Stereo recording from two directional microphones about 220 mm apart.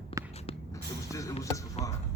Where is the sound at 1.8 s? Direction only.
30° left (ahead or behind).